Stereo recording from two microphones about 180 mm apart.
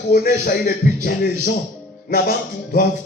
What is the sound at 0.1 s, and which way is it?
Speech, 60° left (ahead or behind).